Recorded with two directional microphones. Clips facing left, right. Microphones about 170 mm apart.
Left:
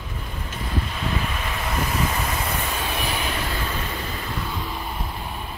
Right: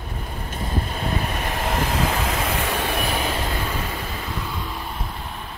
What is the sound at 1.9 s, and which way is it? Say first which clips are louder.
Vehicle: right 2 dB; 90° right.